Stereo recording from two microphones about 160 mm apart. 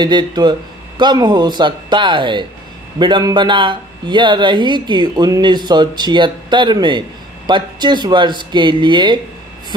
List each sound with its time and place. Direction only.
0.0 s speech: 30° right (ahead or behind)